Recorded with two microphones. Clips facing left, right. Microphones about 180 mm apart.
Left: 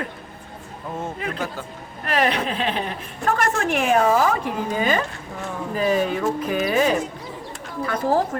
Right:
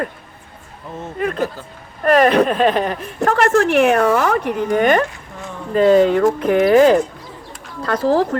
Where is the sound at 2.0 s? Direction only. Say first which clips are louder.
Right 9 dB; 60° right (ahead or behind).